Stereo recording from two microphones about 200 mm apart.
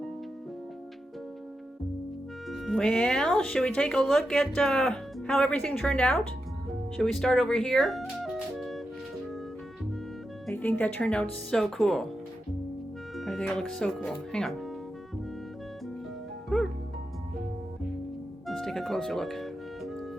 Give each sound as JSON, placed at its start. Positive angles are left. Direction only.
{"t": 2.5, "sound": "speech", "side_deg": 0}
{"t": 10.4, "sound": "speech", "side_deg": 5}
{"t": 13.1, "sound": "speech", "side_deg": 0}
{"t": 16.5, "sound": "music", "side_deg": 5}
{"t": 18.4, "sound": "music", "side_deg": 0}